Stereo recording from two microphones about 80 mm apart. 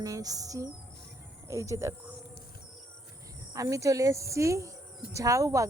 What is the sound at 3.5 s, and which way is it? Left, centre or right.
A woman's voice, right.